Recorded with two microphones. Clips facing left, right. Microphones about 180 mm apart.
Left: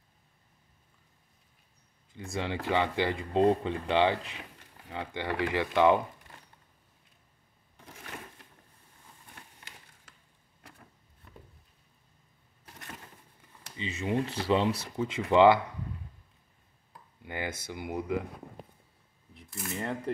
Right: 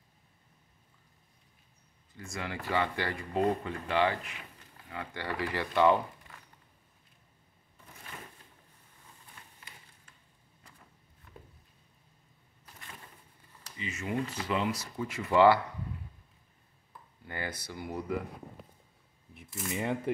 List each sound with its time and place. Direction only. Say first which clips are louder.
2.3 s speech: left 3 dB; 25° left (ahead or behind)
7.7 s a sound: left 4 dB; 90° left
13.7 s speech: left 3 dB; 30° left (ahead or behind)
15.0 s speech: left 2 dB; 20° left (ahead or behind)
17.2 s speech: left 3 dB; 15° left (ahead or behind)
19.5 s speech: right 2 dB; 10° right (ahead or behind)